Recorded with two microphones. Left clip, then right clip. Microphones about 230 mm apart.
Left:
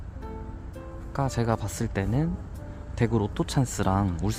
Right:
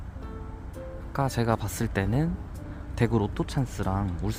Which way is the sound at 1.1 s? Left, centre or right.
Centre.